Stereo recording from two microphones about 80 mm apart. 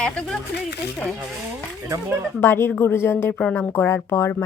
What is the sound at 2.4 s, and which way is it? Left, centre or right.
Speech, left.